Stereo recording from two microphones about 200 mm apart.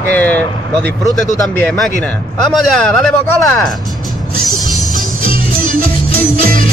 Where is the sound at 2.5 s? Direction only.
Centre (ahead or behind).